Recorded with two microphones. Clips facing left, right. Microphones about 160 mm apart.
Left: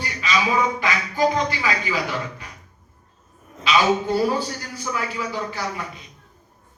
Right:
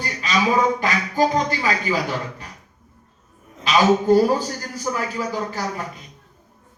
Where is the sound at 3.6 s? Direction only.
45° right (ahead or behind).